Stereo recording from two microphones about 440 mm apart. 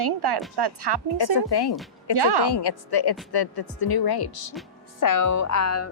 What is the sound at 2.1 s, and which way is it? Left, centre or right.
Speech, right.